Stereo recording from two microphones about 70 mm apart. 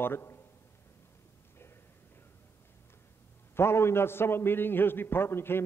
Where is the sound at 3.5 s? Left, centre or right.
Left.